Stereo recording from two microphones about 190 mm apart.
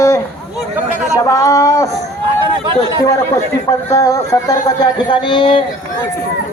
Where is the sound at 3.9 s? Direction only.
15° left (ahead or behind).